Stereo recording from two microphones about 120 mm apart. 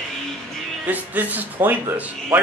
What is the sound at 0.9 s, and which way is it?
Speech, 15° right (ahead or behind).